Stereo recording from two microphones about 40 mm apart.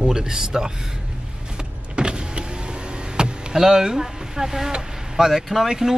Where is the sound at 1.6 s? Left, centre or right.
Right.